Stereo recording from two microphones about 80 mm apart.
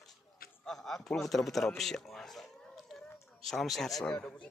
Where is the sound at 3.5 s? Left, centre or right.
Centre.